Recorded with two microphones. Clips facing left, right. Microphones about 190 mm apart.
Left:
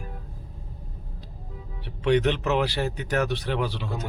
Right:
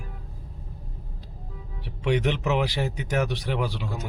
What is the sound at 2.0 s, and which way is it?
Speech, 10° right (ahead or behind).